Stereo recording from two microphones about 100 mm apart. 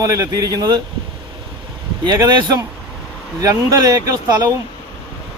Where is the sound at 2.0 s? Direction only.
45° right (ahead or behind).